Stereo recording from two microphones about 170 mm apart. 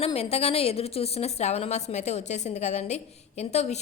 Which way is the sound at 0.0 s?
35° left (ahead or behind).